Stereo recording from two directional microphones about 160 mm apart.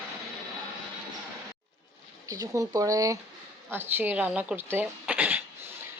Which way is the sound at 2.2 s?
20° right (ahead or behind).